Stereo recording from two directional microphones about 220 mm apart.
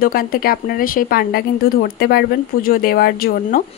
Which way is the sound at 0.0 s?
40° left (ahead or behind).